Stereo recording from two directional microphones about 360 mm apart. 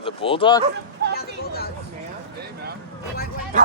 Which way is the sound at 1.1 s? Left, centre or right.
Left.